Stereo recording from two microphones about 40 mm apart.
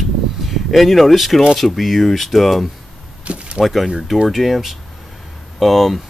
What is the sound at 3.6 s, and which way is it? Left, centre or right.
Speech, centre.